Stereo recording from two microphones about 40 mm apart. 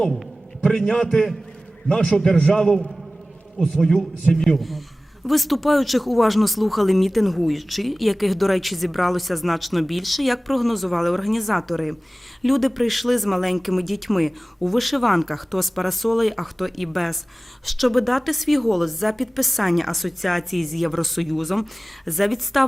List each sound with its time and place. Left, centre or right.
0.6 s a man's voice: centre